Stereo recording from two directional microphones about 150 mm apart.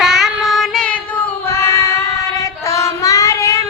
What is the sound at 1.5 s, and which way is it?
Child singing, 20° left (ahead or behind).